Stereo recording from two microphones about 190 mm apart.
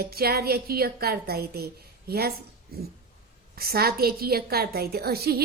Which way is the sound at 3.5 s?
55° right (ahead or behind).